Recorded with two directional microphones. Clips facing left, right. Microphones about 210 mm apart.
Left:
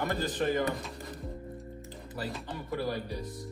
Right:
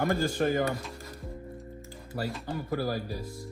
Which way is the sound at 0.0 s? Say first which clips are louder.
Right 4 dB; 45° right (ahead or behind).